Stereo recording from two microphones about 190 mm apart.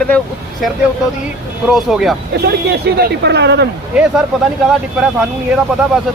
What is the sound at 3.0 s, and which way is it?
Speech, 60° right (ahead or behind).